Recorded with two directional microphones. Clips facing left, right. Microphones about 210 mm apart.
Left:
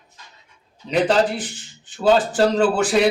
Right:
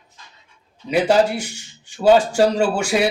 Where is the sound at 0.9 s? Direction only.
10° right (ahead or behind).